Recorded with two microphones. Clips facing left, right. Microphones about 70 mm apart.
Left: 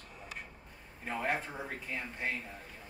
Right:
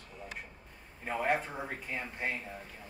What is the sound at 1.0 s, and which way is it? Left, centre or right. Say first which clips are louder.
Speech: right 3 dB; centre.